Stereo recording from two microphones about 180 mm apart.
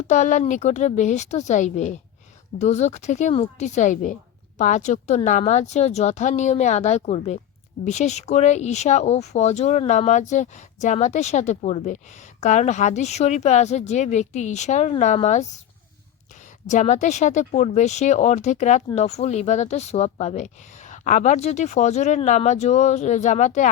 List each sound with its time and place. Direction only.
0.1 s speech: 40° left (ahead or behind)